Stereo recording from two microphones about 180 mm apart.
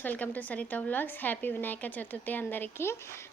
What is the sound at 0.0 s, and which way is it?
A woman's voice, 10° left (ahead or behind).